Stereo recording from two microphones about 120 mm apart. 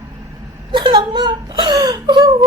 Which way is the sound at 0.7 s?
45° right (ahead or behind).